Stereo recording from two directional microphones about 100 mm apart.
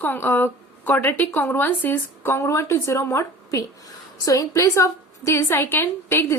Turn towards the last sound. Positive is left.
turn(degrees=20)  # may be behind; listen again after turning